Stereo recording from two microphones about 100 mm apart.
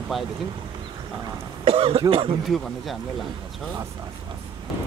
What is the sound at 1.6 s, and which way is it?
Speech, 75° right (ahead or behind).